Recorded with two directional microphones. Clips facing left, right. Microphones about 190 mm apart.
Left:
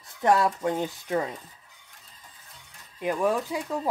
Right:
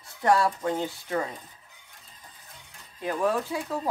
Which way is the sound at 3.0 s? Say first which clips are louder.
Left 1 dB; 15° left (ahead or behind).